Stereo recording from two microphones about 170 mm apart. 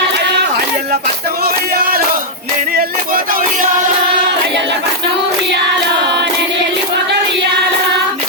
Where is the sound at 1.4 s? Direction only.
60° right (ahead or behind).